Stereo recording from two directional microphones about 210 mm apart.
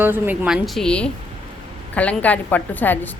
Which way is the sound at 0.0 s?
10° right (ahead or behind).